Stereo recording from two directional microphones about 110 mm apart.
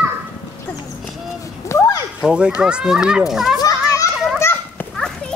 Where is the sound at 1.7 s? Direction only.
30° left (ahead or behind).